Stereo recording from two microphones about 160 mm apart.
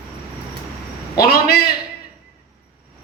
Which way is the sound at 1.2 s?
70° left (ahead or behind).